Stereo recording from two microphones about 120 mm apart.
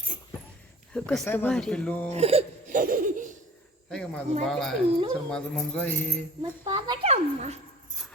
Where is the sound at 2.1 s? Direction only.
55° right (ahead or behind).